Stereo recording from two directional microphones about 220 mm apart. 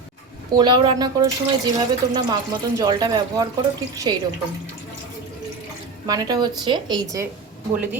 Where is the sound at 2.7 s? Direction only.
15° right (ahead or behind).